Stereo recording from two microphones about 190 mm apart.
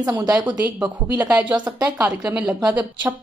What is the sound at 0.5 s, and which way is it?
A woman's voice, 5° right (ahead or behind).